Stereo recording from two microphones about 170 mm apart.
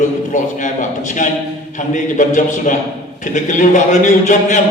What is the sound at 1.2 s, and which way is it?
A man's voice, 45° left (ahead or behind).